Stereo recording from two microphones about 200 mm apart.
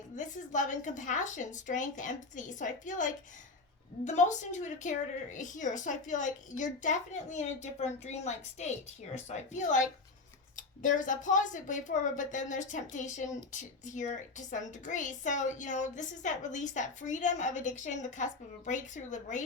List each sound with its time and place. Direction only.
0.2 s a woman's voice: 40° left (ahead or behind)